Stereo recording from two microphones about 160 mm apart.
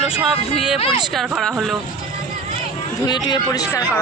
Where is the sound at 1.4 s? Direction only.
Centre (ahead or behind).